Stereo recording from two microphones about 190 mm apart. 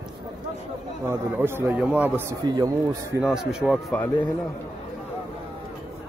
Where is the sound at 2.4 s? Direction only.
20° right (ahead or behind).